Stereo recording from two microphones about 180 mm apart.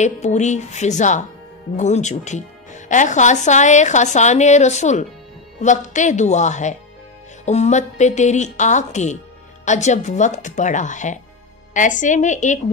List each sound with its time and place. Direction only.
0.0 s speech: 40° left (ahead or behind)